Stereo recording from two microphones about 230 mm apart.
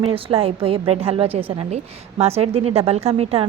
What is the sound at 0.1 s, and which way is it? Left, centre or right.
A woman's voice, right.